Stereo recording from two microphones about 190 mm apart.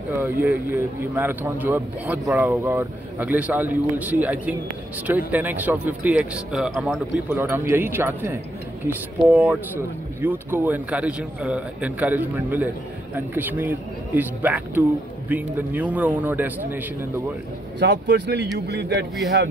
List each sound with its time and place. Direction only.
0.1 s speech: 10° right (ahead or behind)
17.7 s speech: 65° right (ahead or behind)